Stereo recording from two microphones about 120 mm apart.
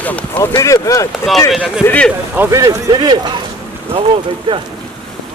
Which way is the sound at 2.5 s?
30° right (ahead or behind).